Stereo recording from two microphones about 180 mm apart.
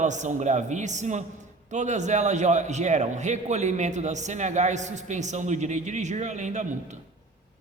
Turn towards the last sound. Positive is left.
turn(degrees=-40)  # may be behind; listen again after turning